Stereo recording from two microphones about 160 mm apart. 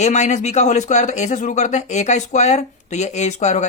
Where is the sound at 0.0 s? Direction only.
45° left (ahead or behind).